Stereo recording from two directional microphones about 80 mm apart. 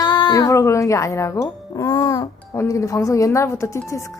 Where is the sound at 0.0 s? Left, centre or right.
Left.